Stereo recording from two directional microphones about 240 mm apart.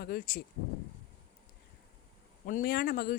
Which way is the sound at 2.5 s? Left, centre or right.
Left.